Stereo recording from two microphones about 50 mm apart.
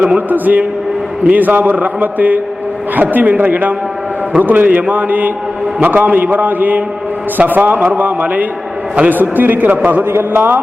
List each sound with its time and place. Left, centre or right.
0.3 s a man's voice: right